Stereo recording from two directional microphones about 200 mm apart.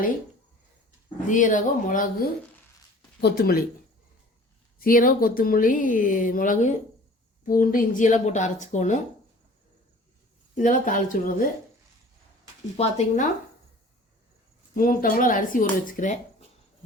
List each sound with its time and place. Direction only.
1.3 s speech: 40° left (ahead or behind)
3.2 s speech: 50° left (ahead or behind)
4.8 s speech: 45° left (ahead or behind)
10.5 s speech: 40° left (ahead or behind)
12.7 s speech: 30° left (ahead or behind)
14.8 s speech: 45° left (ahead or behind)